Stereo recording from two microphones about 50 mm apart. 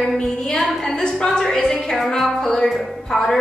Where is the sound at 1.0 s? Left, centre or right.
Centre.